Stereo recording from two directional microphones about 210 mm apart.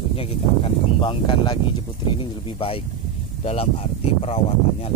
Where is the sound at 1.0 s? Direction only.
25° left (ahead or behind).